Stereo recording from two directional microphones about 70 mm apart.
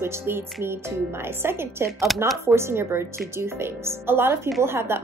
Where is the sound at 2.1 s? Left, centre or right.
Centre.